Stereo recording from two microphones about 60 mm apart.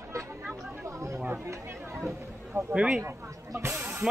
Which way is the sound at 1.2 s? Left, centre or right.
Right.